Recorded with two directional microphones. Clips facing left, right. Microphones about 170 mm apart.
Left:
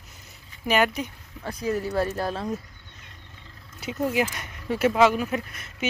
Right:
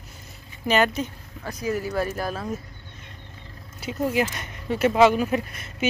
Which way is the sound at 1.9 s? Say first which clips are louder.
Left 1 dB; 30° left (ahead or behind).